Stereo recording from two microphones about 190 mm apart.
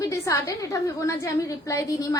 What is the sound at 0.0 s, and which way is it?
A woman's voice, 15° left (ahead or behind).